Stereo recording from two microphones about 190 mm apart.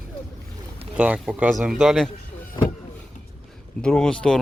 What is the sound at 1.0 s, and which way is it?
Speech, 5° right (ahead or behind).